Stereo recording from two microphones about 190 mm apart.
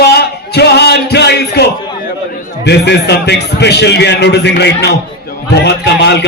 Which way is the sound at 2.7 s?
60° left (ahead or behind).